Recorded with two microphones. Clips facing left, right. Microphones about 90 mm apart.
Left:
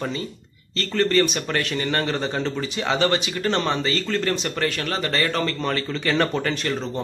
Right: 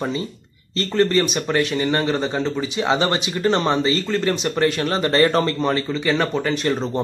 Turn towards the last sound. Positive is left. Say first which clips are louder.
# right 5 dB
turn(degrees=-25)  # may be behind; listen again after turning